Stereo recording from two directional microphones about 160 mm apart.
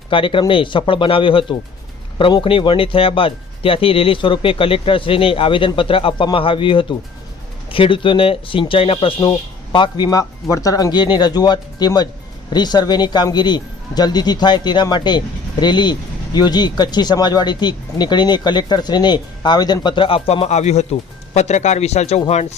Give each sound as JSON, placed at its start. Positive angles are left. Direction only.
{"t": 0.1, "sound": "speech", "side_deg": 35}